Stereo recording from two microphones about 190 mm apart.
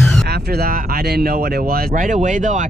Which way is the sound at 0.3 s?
55° right (ahead or behind).